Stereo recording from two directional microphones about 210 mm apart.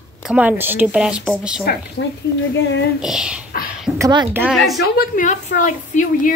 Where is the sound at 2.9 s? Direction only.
5° right (ahead or behind).